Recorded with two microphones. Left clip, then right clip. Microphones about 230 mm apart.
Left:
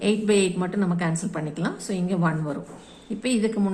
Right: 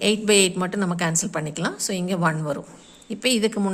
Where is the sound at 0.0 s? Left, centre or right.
Right.